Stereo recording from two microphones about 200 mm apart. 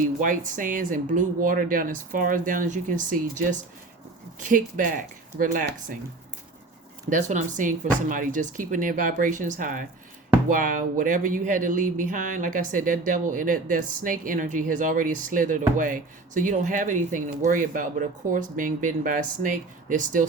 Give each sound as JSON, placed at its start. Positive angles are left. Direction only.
{"t": 0.0, "sound": "speech", "side_deg": -40}
{"t": 7.1, "sound": "speech", "side_deg": -35}